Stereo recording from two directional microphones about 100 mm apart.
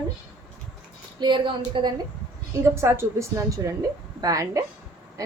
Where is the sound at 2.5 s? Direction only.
30° right (ahead or behind).